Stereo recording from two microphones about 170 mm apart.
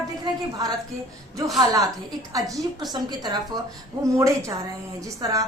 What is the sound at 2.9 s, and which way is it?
Speech, 25° right (ahead or behind).